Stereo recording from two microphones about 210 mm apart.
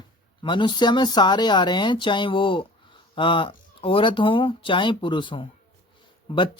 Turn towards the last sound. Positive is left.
turn(degrees=25)  # may be behind; listen again after turning